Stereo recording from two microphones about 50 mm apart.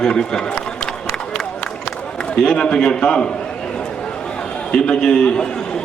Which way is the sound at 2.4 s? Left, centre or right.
Centre.